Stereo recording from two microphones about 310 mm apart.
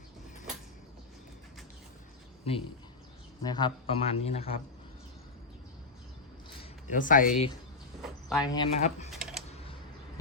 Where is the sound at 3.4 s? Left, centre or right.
Centre.